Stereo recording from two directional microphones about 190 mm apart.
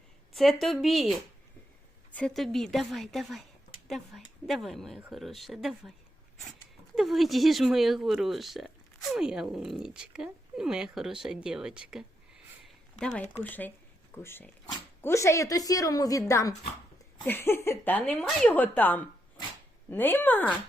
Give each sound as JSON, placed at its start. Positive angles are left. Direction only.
{"t": 0.3, "sound": "speech", "side_deg": 0}
{"t": 2.1, "sound": "speech", "side_deg": 0}
{"t": 6.9, "sound": "speech", "side_deg": 0}